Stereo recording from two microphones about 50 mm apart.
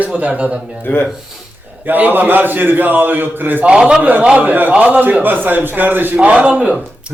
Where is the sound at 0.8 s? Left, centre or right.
Left.